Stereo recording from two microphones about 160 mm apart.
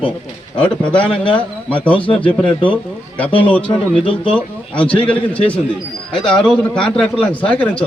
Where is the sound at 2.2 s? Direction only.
30° left (ahead or behind).